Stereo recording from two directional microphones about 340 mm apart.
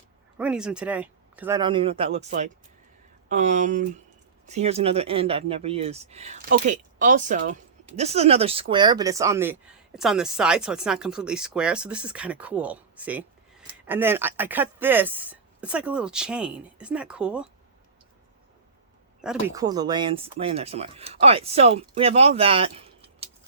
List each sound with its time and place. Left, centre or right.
0.3 s speech: centre
19.2 s speech: centre